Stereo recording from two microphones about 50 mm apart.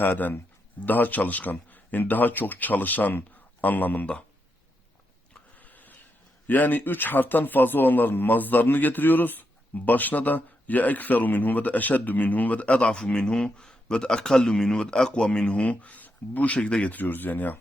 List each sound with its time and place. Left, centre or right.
0.0 s a man's voice: left
5.6 s a sound: left
6.5 s a man's voice: left; by 15.4 s centre
15.4 s speech: left
16.9 s a man's voice: left